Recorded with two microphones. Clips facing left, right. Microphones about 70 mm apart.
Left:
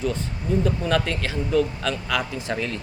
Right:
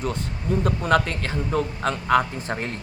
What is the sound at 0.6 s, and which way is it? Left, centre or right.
Speech, right.